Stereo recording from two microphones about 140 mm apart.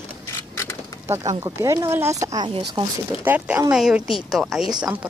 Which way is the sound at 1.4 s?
20° right (ahead or behind).